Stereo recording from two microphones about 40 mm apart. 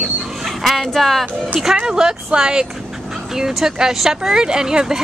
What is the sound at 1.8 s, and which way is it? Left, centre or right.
Speech, centre.